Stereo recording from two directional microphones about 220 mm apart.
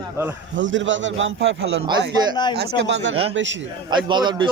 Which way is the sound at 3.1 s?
25° right (ahead or behind).